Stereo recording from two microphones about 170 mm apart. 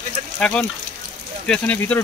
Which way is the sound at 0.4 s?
5° left (ahead or behind).